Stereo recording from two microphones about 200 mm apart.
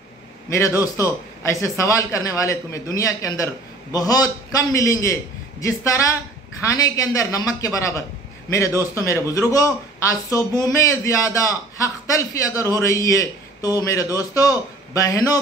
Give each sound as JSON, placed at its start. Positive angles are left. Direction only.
{"t": 0.5, "sound": "a man's voice", "side_deg": 15}